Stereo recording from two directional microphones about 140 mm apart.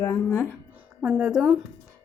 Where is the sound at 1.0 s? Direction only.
10° right (ahead or behind).